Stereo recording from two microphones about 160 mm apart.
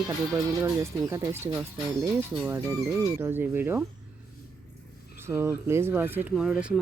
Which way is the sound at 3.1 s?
15° right (ahead or behind).